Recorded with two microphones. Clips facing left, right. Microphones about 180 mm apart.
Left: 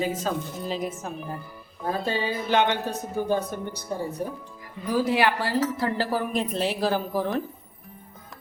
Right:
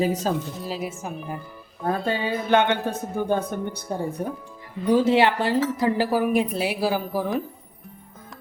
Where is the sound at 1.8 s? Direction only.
55° right (ahead or behind).